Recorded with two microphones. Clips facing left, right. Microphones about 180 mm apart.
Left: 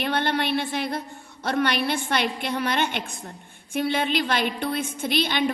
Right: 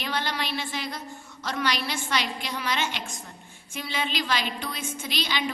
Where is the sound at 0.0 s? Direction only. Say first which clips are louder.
Left 6 dB; 60° left (ahead or behind).